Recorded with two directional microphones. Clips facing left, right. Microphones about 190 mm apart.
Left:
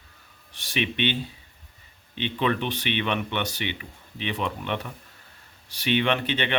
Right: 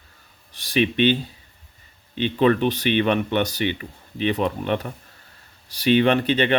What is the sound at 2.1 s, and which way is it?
Speech, 40° right (ahead or behind).